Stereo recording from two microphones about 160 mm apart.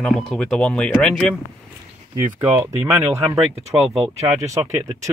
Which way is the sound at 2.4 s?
10° right (ahead or behind).